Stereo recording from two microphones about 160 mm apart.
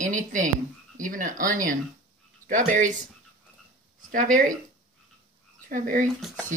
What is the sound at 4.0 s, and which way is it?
Speech, 55° right (ahead or behind).